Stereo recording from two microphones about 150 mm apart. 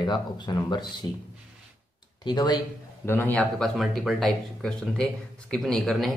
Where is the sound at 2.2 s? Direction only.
30° left (ahead or behind).